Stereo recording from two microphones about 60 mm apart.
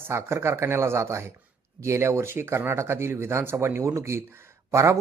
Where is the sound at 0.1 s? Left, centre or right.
Right.